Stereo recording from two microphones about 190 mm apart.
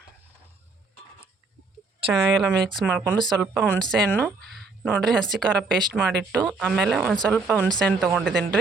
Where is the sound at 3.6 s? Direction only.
5° left (ahead or behind).